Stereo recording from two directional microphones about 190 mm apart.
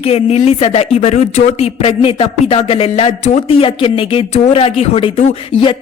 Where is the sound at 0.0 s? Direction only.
30° left (ahead or behind).